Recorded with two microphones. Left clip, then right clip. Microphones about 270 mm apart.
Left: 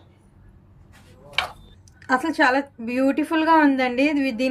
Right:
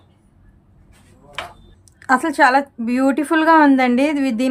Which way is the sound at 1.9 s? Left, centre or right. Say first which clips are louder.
Right 5 dB; centre.